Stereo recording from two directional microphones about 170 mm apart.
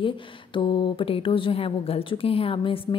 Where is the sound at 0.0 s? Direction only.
30° left (ahead or behind).